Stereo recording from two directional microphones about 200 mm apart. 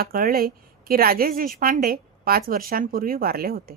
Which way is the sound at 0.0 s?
45° right (ahead or behind).